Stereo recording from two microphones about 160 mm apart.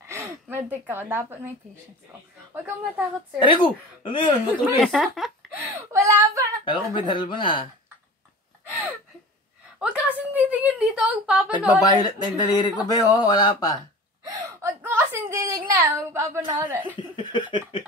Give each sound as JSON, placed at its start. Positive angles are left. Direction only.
{"t": 0.0, "sound": "speech", "side_deg": -15}
{"t": 2.5, "sound": "a child's voice", "side_deg": -10}
{"t": 3.3, "sound": "speech", "side_deg": 30}
{"t": 4.8, "sound": "speech", "side_deg": 0}
{"t": 5.8, "sound": "a sound", "side_deg": -20}
{"t": 6.6, "sound": "speech", "side_deg": 30}
{"t": 8.6, "sound": "a sound", "side_deg": -10}
{"t": 11.6, "sound": "speech", "side_deg": 25}
{"t": 14.2, "sound": "gasp", "side_deg": -20}
{"t": 15.7, "sound": "a child's voice", "side_deg": -10}
{"t": 17.1, "sound": "speech", "side_deg": 30}